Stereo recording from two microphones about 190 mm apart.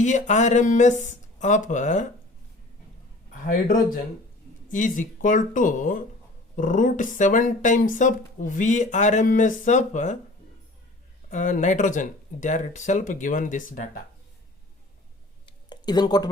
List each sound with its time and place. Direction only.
0.0 s speech: 40° left (ahead or behind)
3.4 s speech: 50° left (ahead or behind)
11.3 s speech: 40° left (ahead or behind)
15.4 s a sound: 20° left (ahead or behind)